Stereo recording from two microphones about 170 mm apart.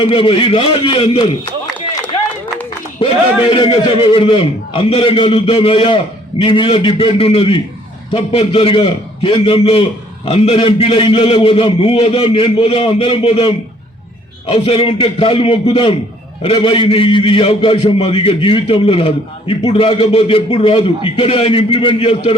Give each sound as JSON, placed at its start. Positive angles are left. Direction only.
{"t": 0.0, "sound": "a man's voice", "side_deg": 30}
{"t": 3.5, "sound": "a man's voice", "side_deg": 30}